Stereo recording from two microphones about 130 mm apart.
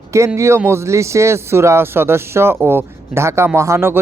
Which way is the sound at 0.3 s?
20° right (ahead or behind).